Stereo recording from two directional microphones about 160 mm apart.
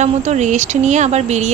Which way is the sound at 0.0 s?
50° right (ahead or behind).